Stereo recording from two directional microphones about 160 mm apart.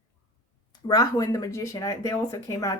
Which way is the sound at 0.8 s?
25° left (ahead or behind).